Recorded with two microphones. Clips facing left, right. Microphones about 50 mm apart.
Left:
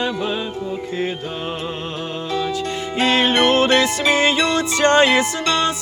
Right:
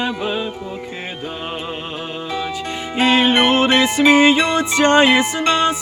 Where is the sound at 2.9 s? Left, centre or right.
Centre.